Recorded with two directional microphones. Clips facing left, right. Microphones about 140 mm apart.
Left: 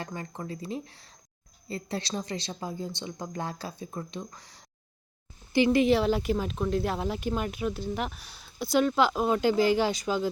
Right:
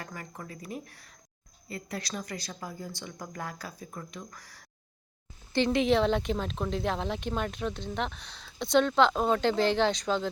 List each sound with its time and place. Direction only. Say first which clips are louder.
0.0 s a woman's voice: left 5 dB; 25° left (ahead or behind)
5.5 s speech: left 3 dB; 5° left (ahead or behind)